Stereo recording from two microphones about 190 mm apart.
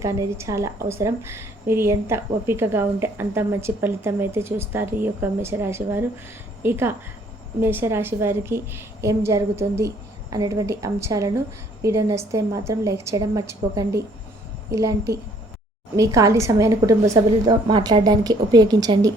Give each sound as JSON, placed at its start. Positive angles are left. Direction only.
{"t": 0.0, "sound": "a woman's voice", "side_deg": -15}